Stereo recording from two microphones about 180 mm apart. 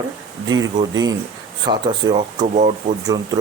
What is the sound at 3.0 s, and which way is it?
Speech, 20° right (ahead or behind).